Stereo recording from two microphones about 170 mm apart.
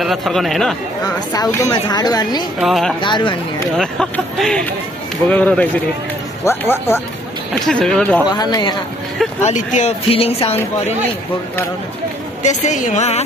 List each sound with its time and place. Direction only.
0.0 s speech: centre (ahead or behind)
1.0 s speech: 20° left (ahead or behind)
2.6 s speech: centre (ahead or behind)
3.0 s speech: 25° left (ahead or behind)
3.7 s speech: centre (ahead or behind)
7.6 s speech: centre (ahead or behind)
8.3 s speech: 25° left (ahead or behind)
9.5 s speech: 40° left (ahead or behind)
12.4 s a woman's voice: 45° left (ahead or behind)